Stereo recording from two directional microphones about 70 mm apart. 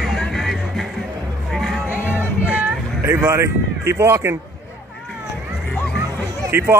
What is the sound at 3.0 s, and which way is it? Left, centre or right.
Speech, right.